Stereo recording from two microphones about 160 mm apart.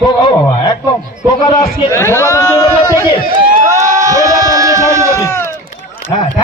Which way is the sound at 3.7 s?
20° right (ahead or behind).